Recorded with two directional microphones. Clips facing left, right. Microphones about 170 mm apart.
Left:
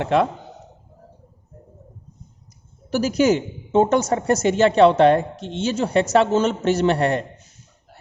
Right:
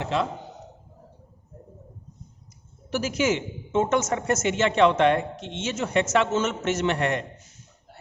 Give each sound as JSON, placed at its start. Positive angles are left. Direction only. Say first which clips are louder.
{"t": 0.0, "sound": "a man's voice", "louder": "left 7 dB", "side_deg": 60}
{"t": 2.9, "sound": "a woman's voice", "louder": "left 6 dB", "side_deg": 40}